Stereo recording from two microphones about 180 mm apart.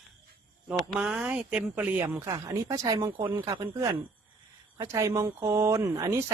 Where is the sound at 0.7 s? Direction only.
5° right (ahead or behind).